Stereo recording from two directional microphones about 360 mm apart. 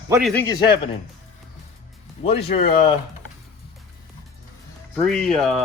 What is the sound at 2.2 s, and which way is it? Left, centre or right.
Speech, left.